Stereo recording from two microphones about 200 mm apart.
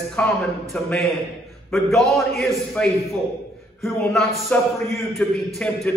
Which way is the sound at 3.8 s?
Centre (ahead or behind).